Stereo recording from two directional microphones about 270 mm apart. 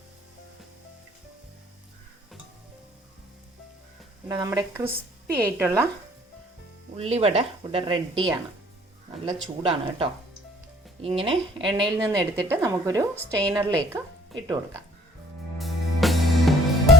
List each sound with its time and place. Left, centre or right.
4.3 s a woman's voice: centre
6.9 s a woman's voice: right; by 13.7 s centre
15.5 s music: centre